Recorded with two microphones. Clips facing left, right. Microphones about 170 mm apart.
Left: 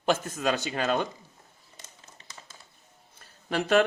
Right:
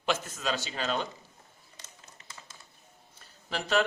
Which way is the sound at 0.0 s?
55° left (ahead or behind).